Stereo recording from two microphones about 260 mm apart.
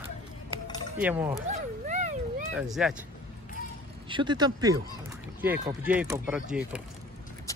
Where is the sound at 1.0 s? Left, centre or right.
Centre.